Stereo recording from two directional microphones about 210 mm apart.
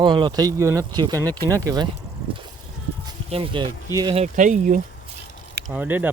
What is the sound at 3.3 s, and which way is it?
Speech, 25° right (ahead or behind).